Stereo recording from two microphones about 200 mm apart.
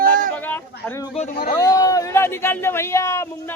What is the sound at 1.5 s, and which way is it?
A man's voice, 15° left (ahead or behind).